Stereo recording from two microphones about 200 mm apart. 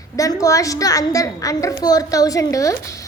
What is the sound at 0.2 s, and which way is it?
A woman's voice, 15° left (ahead or behind).